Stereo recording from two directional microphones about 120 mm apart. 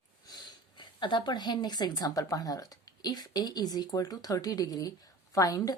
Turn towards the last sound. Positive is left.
turn(degrees=30)  # may be behind; listen again after turning